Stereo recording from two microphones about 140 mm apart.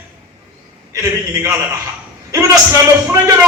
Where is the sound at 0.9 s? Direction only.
20° right (ahead or behind).